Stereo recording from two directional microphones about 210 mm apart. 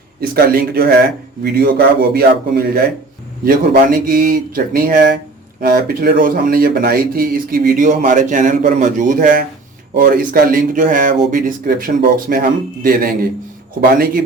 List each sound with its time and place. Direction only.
0.2 s speech: 45° right (ahead or behind)